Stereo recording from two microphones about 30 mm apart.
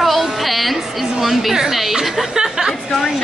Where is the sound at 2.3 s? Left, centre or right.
Right.